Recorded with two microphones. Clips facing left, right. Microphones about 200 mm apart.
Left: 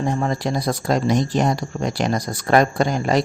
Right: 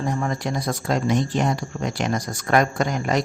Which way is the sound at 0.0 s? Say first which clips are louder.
Left 3 dB; 30° left (ahead or behind).